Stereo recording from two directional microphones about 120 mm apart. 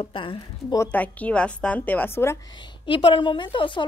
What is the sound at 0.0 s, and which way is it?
Speech, 45° left (ahead or behind).